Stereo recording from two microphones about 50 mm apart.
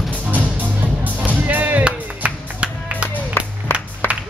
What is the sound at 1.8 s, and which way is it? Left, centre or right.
Music, right.